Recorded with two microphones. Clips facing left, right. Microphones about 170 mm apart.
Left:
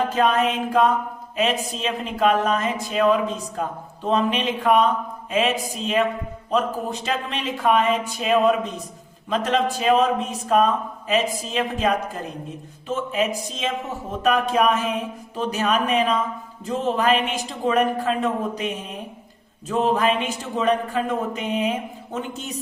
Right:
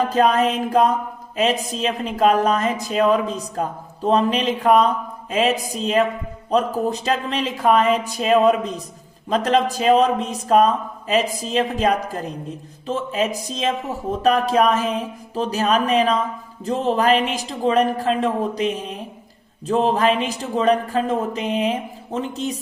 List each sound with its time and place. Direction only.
0.1 s a woman's voice: 35° right (ahead or behind)